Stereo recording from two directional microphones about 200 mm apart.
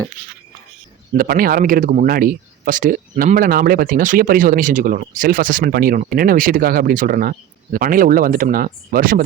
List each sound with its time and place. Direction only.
1.1 s speech: 45° right (ahead or behind)